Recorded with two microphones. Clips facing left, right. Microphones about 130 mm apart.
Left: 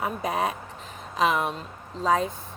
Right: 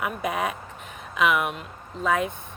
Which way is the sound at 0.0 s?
30° left (ahead or behind).